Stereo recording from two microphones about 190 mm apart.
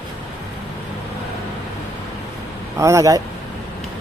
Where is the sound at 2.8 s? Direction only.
15° right (ahead or behind).